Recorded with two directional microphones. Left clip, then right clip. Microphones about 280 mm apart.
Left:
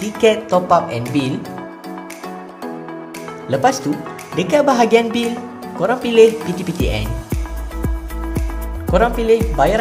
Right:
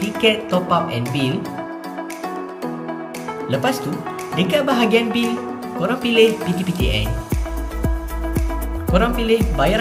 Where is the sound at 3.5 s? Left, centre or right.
Left.